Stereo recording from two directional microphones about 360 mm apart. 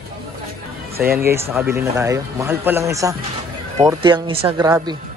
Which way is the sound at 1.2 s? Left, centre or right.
Centre.